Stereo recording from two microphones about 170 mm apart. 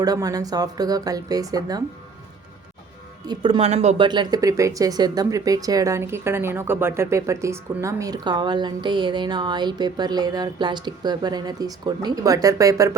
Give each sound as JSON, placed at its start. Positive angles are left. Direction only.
{"t": 0.0, "sound": "speech", "side_deg": -20}
{"t": 3.2, "sound": "speech", "side_deg": -30}